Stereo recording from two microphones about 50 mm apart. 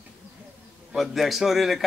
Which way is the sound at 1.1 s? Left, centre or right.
Centre.